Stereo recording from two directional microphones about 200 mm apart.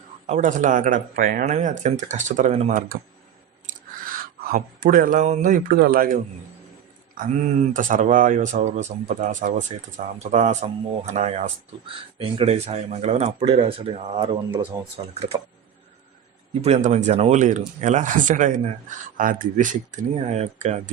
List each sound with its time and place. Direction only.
0.3 s speech: 40° right (ahead or behind)
3.7 s chewing: 40° right (ahead or behind)
4.5 s speech: 45° right (ahead or behind)
7.2 s speech: 40° right (ahead or behind)
16.6 s speech: 35° right (ahead or behind)